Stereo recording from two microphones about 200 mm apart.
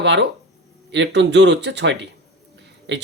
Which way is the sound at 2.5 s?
60° right (ahead or behind).